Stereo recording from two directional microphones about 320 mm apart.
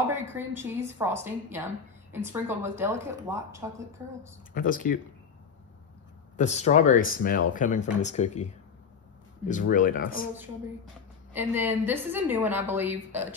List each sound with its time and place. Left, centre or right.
0.1 s speech: centre
4.6 s speech: left
6.3 s speech: left
9.5 s speech: left
11.3 s speech: centre